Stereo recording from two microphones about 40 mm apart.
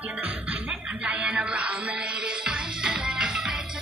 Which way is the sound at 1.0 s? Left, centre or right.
Right.